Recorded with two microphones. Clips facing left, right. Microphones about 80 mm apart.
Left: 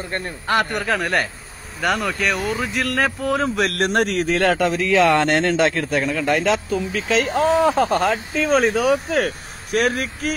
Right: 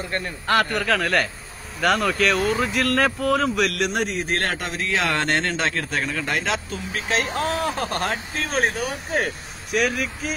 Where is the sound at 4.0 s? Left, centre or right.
Left.